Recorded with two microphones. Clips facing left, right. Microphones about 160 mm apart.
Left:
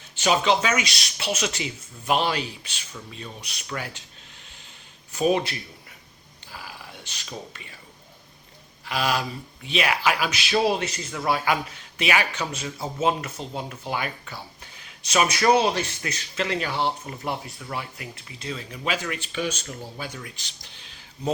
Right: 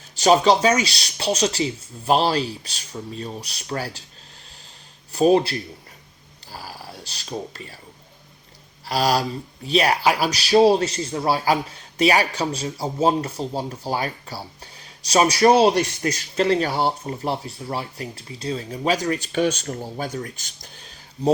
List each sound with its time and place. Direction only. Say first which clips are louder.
0.2 s speech: right 6 dB; 35° right (ahead or behind)
5.1 s speech: right 6 dB; 35° right (ahead or behind)
8.8 s speech: right 5 dB; 35° right (ahead or behind)